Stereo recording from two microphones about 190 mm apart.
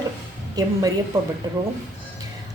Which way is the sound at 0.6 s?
20° right (ahead or behind).